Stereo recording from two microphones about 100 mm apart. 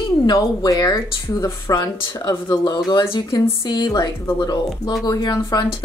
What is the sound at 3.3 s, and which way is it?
Speech, 40° left (ahead or behind).